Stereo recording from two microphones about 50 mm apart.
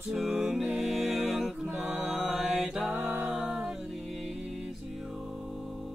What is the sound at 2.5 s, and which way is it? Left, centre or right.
Mantra, centre.